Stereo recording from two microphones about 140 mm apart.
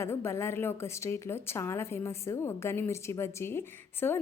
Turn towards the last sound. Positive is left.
turn(degrees=15)  # may be behind; listen again after turning